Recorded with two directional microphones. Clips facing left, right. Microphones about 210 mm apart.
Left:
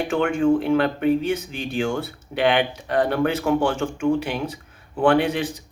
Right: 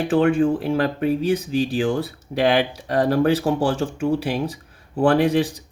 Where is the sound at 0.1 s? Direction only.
35° right (ahead or behind).